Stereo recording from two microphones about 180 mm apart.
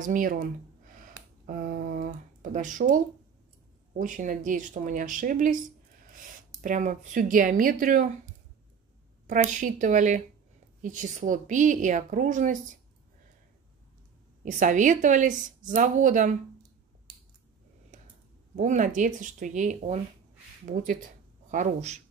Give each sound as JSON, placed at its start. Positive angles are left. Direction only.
{"t": 0.0, "sound": "speech", "side_deg": -50}
{"t": 6.6, "sound": "speech", "side_deg": -45}
{"t": 9.3, "sound": "speech", "side_deg": -45}
{"t": 14.4, "sound": "speech", "side_deg": -45}
{"t": 17.9, "sound": "clicking", "side_deg": -45}
{"t": 18.6, "sound": "speech", "side_deg": -45}